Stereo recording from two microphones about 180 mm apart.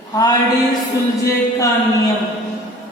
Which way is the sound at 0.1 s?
20° left (ahead or behind).